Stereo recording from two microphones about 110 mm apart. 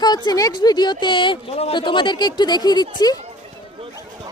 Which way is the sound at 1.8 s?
45° left (ahead or behind).